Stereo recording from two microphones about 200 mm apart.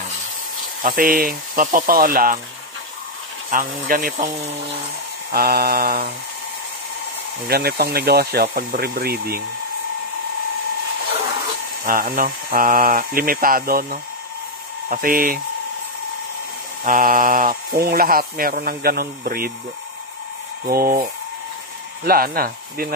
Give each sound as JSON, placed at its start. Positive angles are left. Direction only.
{"t": 0.8, "sound": "speech", "side_deg": -45}
{"t": 3.4, "sound": "speech", "side_deg": -40}
{"t": 5.3, "sound": "speech", "side_deg": -50}
{"t": 7.4, "sound": "speech", "side_deg": -50}
{"t": 11.8, "sound": "speech", "side_deg": -45}
{"t": 16.8, "sound": "speech", "side_deg": -45}
{"t": 20.6, "sound": "speech", "side_deg": -45}